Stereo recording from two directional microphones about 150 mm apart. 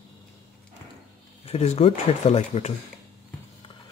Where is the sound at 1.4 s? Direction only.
45° left (ahead or behind).